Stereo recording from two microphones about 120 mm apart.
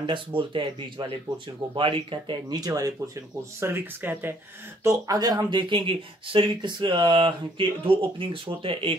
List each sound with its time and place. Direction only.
0.0 s speech: 45° right (ahead or behind)
3.6 s speech: 15° right (ahead or behind)
4.8 s speech: 30° right (ahead or behind); by 8.9 s 45° right (ahead or behind)